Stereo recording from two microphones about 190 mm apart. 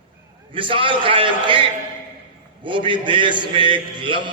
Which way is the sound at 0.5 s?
25° right (ahead or behind).